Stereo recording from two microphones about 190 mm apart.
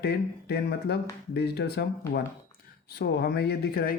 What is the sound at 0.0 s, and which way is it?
Speech, 60° left (ahead or behind).